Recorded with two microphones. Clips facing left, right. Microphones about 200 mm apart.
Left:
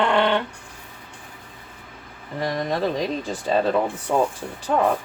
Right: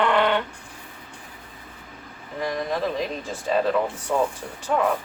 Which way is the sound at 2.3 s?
35° left (ahead or behind).